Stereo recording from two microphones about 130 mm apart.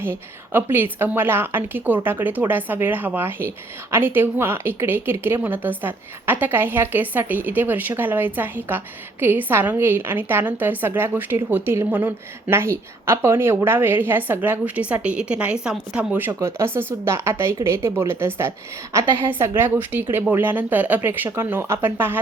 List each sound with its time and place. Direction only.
0.0 s a woman's voice: 15° right (ahead or behind)